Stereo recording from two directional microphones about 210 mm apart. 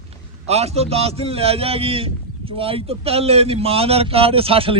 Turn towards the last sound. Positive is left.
turn(degrees=-25)  # may be behind; listen again after turning